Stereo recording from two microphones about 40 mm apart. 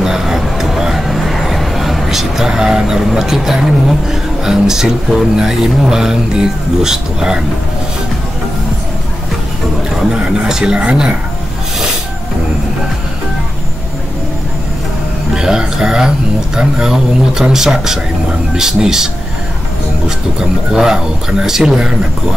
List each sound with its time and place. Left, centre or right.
0.0 s speech: centre
10.1 s speech: centre
15.3 s speech: centre
20.1 s speech: centre